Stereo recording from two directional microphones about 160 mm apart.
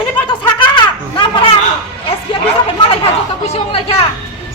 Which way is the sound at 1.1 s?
30° left (ahead or behind).